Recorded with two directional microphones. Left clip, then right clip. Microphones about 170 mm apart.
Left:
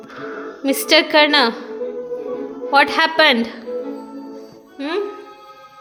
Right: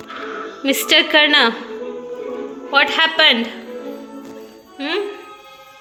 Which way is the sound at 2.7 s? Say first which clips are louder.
Even; 30° left (ahead or behind).